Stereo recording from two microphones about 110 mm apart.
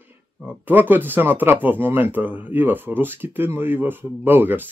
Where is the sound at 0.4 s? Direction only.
15° right (ahead or behind).